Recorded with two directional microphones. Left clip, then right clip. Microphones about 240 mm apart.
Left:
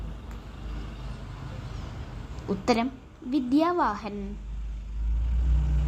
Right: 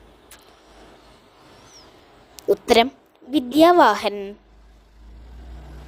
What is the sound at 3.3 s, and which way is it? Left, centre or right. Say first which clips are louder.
Speech: right 10 dB; right.